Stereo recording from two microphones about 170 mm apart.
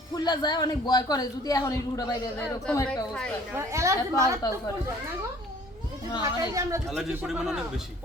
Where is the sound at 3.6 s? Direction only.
15° right (ahead or behind).